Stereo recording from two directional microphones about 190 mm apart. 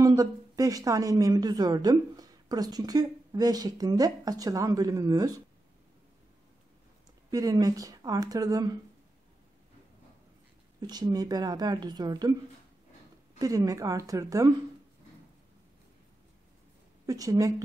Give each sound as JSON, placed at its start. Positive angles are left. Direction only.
{"t": 0.0, "sound": "a woman's voice", "side_deg": -20}
{"t": 7.2, "sound": "a woman's voice", "side_deg": -20}
{"t": 10.8, "sound": "a woman's voice", "side_deg": -20}
{"t": 13.4, "sound": "a woman's voice", "side_deg": -15}
{"t": 17.0, "sound": "a woman's voice", "side_deg": -20}